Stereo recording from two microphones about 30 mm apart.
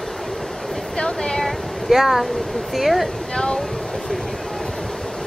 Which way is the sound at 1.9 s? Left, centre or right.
Centre.